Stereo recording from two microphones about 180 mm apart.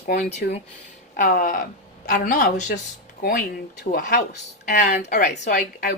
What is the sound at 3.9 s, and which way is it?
Speech, 50° left (ahead or behind).